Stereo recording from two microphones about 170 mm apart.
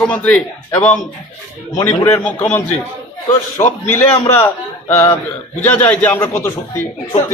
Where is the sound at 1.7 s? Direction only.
15° left (ahead or behind).